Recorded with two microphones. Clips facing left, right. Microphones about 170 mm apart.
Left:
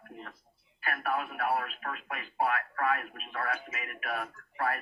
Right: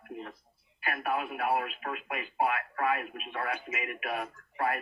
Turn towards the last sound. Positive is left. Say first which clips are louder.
# right 1 dB
turn(degrees=-20)  # may be behind; listen again after turning